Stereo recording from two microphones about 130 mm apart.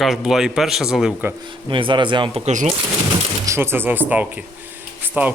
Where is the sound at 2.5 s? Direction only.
65° right (ahead or behind).